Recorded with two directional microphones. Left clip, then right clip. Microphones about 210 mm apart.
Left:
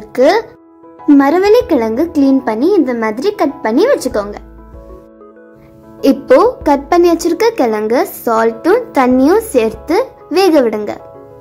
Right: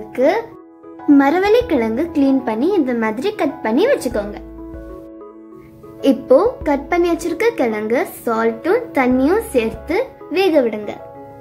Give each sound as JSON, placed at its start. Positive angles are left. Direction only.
{"t": 0.1, "sound": "a child's voice", "side_deg": 20}
{"t": 1.1, "sound": "a woman's voice", "side_deg": 10}
{"t": 6.3, "sound": "a woman's voice", "side_deg": 20}